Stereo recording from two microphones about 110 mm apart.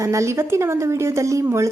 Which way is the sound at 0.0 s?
25° right (ahead or behind).